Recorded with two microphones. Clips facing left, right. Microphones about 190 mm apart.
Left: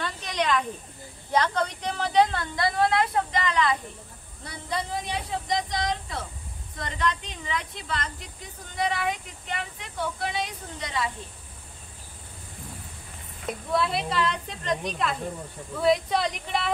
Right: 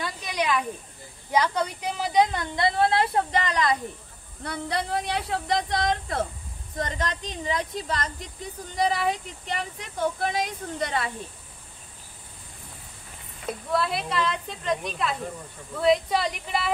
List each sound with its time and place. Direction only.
0.0 s a sound: 10° right (ahead or behind)
1.3 s a woman's voice: 10° right (ahead or behind); by 3.7 s 40° right (ahead or behind)
4.5 s speech: 65° right (ahead or behind)
6.8 s speech: 40° right (ahead or behind); by 11.1 s 55° right (ahead or behind)
13.7 s speech: centre (ahead or behind)